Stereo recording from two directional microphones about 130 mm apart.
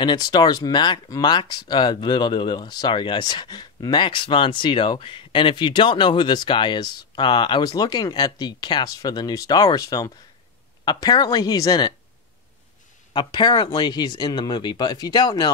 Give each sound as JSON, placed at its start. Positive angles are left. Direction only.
{"t": 0.0, "sound": "speech", "side_deg": 35}
{"t": 13.1, "sound": "speech", "side_deg": 35}